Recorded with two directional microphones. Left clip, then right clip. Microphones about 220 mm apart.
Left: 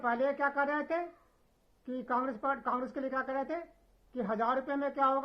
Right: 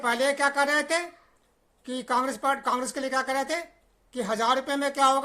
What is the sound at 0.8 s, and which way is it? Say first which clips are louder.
Speech: right 8 dB; 20° right (ahead or behind).